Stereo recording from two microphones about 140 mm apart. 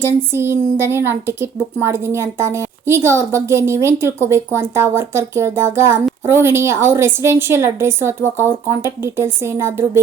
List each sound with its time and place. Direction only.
0.3 s a woman's voice: 15° right (ahead or behind)